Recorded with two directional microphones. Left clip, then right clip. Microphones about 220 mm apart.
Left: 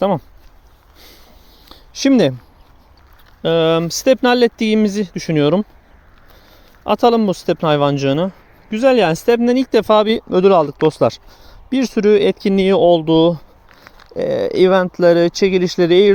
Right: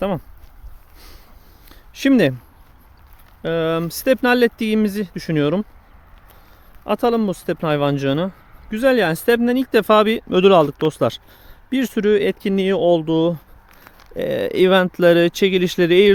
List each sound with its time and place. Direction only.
0.9 s a sound: 10° left (ahead or behind)
3.4 s speech: 20° left (ahead or behind)
6.8 s speech: 20° left (ahead or behind); by 10.4 s centre (ahead or behind)
11.7 s speech: 5° left (ahead or behind)
15.1 s speech: 20° right (ahead or behind)